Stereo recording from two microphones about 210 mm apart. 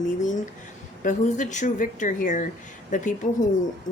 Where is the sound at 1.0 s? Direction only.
35° left (ahead or behind).